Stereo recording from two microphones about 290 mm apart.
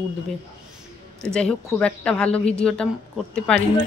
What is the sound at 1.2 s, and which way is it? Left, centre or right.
Speech, centre.